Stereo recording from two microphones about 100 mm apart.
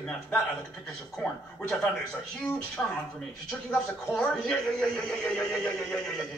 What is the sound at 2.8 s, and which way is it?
A man's voice, 20° left (ahead or behind).